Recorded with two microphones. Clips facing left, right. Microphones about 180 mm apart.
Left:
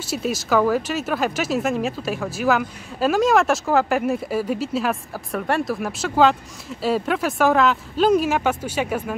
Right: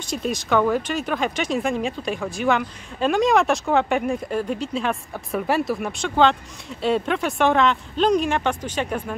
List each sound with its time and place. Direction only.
0.0 s speech: 5° left (ahead or behind)